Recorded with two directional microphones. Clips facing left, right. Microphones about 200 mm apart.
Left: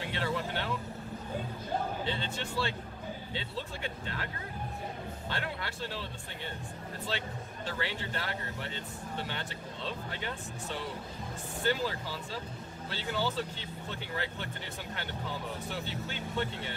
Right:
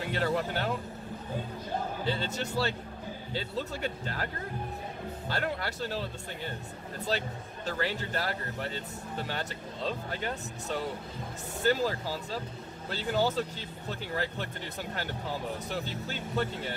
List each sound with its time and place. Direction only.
0.0 s speech: 45° right (ahead or behind)
2.0 s speech: 40° right (ahead or behind)
5.3 s speech: 40° right (ahead or behind)
7.6 s speech: 40° right (ahead or behind)
15.7 s speech: 40° right (ahead or behind)